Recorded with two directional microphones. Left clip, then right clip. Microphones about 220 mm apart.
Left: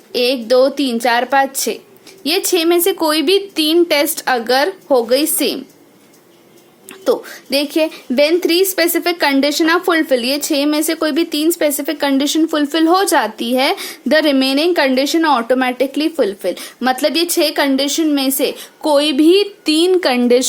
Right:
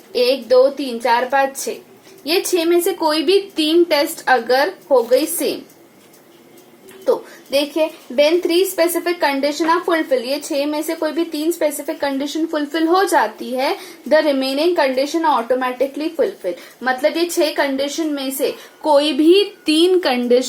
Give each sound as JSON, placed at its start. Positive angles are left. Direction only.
{"t": 0.1, "sound": "a woman's voice", "side_deg": 40}
{"t": 7.5, "sound": "a woman's voice", "side_deg": 45}